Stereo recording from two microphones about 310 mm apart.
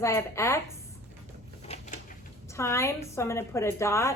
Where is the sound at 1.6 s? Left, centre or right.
Left.